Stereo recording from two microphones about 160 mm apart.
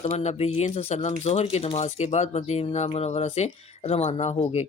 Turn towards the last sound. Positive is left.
turn(degrees=40)  # may be behind; listen again after turning